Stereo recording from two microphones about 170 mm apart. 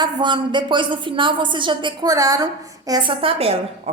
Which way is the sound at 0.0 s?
25° right (ahead or behind).